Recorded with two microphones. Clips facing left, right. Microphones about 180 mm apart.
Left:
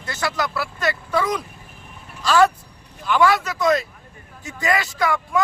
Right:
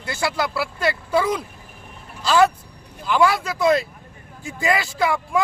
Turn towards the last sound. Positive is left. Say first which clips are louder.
# right 1 dB
turn(degrees=-25)  # may be behind; listen again after turning